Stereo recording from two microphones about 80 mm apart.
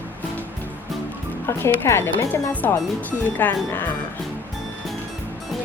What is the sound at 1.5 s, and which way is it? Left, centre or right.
Speech, left.